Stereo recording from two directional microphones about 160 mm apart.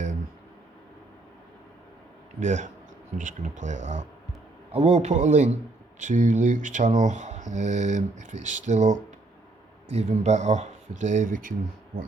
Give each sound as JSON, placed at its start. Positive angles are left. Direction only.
{"t": 2.4, "sound": "speech", "side_deg": -50}
{"t": 4.7, "sound": "speech", "side_deg": -40}